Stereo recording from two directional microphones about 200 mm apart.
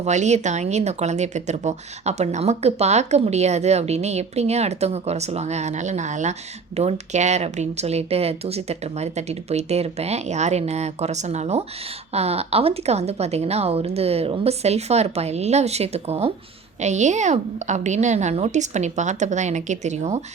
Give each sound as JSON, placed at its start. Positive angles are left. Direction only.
{"t": 0.0, "sound": "speech", "side_deg": -35}